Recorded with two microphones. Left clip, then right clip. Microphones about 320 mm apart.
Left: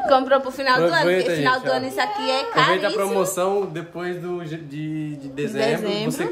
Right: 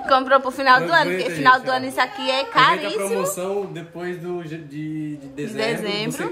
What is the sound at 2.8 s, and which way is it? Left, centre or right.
Speech, left.